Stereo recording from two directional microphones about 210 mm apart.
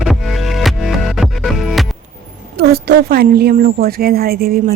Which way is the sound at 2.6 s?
50° right (ahead or behind).